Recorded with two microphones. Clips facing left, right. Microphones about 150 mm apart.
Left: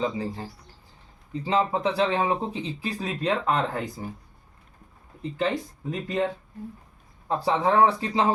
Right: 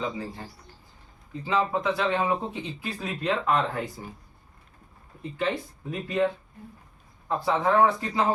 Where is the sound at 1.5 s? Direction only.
35° left (ahead or behind).